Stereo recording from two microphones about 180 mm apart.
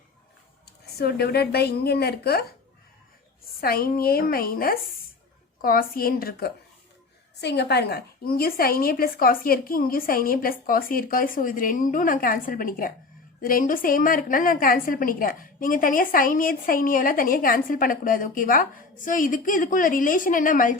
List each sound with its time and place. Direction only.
0.9 s a woman's voice: 60° left (ahead or behind)
3.6 s a woman's voice: 55° left (ahead or behind)
7.4 s a woman's voice: 70° left (ahead or behind); by 20.7 s 50° left (ahead or behind)